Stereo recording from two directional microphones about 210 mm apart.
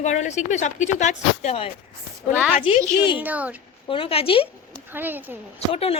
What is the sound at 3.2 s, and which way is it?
Speech, 5° right (ahead or behind).